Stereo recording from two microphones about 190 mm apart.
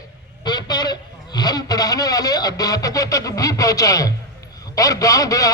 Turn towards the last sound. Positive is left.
turn(degrees=20)  # may be behind; listen again after turning